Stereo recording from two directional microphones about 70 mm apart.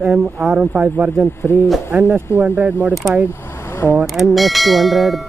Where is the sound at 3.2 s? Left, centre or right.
Left.